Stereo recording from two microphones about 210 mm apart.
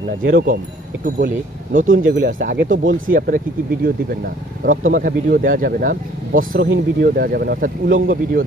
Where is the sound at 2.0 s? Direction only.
45° right (ahead or behind).